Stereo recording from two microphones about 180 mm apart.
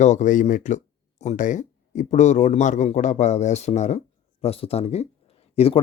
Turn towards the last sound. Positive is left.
turn(degrees=35)  # may be behind; listen again after turning